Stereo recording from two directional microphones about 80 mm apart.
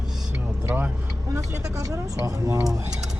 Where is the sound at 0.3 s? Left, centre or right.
Right.